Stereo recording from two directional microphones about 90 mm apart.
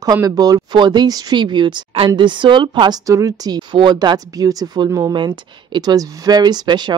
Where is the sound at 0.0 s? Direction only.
45° right (ahead or behind); by 3.0 s 60° right (ahead or behind).